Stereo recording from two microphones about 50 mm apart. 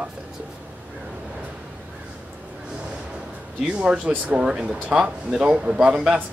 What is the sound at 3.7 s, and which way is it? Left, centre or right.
Speech, right.